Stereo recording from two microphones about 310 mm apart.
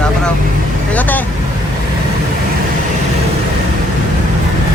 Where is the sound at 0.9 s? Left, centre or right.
Centre.